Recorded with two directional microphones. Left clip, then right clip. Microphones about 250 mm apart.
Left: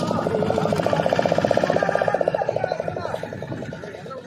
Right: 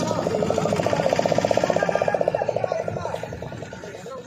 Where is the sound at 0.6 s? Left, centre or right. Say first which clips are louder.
Left 1 dB; left.